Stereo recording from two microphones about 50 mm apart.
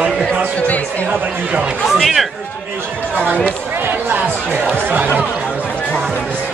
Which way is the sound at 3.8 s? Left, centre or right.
Right.